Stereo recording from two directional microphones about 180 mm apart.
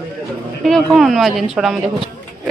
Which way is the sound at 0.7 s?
Centre (ahead or behind).